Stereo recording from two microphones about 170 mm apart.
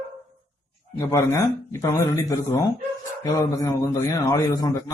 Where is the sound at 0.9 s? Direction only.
20° left (ahead or behind).